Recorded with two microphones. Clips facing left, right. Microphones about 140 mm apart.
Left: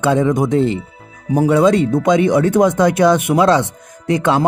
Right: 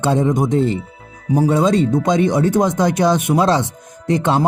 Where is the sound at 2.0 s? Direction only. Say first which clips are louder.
Left 2 dB; 20° right (ahead or behind).